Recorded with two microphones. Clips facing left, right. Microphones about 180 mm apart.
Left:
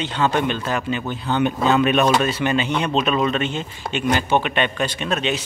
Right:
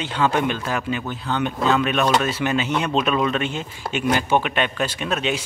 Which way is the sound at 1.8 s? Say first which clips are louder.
Left 3 dB; 5° left (ahead or behind).